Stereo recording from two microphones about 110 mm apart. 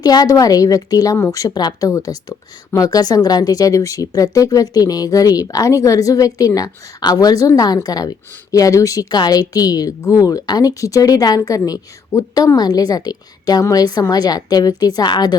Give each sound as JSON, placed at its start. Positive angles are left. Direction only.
{"t": 0.0, "sound": "speech", "side_deg": 35}